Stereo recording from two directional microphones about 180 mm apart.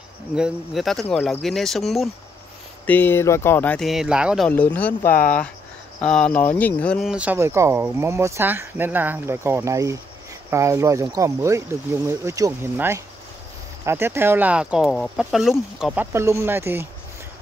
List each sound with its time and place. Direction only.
0.4 s speech: centre (ahead or behind)
2.9 s speech: 10° left (ahead or behind); by 4.5 s 5° right (ahead or behind)
4.5 s speech: 10° left (ahead or behind)
5.0 s speech: 50° left (ahead or behind)
6.0 s speech: 5° left (ahead or behind); by 16.8 s 10° right (ahead or behind)